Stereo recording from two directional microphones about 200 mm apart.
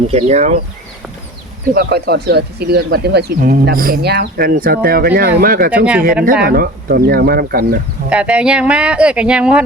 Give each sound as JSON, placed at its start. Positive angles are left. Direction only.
{"t": 0.1, "sound": "speech", "side_deg": -35}
{"t": 1.7, "sound": "speech", "side_deg": -55}
{"t": 5.7, "sound": "speech", "side_deg": -5}
{"t": 6.4, "sound": "speech", "side_deg": -50}
{"t": 8.1, "sound": "speech", "side_deg": -5}